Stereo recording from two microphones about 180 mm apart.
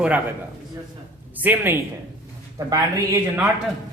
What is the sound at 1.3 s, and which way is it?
Speech, 10° right (ahead or behind).